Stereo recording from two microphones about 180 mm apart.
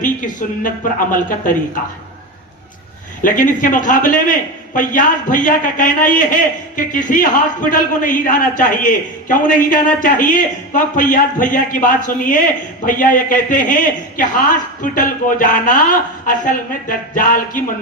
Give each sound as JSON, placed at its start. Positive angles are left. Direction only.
{"t": 0.0, "sound": "a man's voice", "side_deg": 45}
{"t": 3.2, "sound": "a man's voice", "side_deg": 45}
{"t": 14.9, "sound": "a man's voice", "side_deg": 50}